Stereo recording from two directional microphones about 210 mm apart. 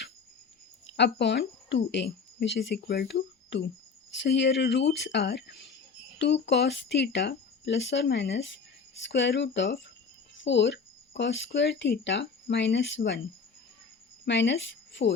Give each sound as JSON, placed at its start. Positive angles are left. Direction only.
{"t": 0.9, "sound": "speech", "side_deg": 55}
{"t": 14.3, "sound": "speech", "side_deg": 55}